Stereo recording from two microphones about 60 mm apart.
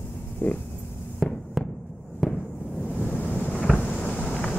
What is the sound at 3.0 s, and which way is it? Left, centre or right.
Waves, left.